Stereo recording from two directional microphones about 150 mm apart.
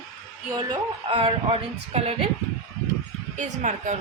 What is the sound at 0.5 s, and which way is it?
Speech, 30° right (ahead or behind).